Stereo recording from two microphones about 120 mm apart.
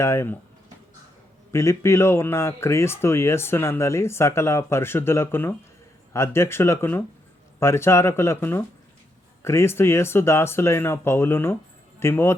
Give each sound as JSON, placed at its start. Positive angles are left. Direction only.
{"t": 0.0, "sound": "speech", "side_deg": 20}
{"t": 1.5, "sound": "speech", "side_deg": 25}